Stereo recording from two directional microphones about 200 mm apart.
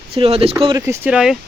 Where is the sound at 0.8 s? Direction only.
10° right (ahead or behind).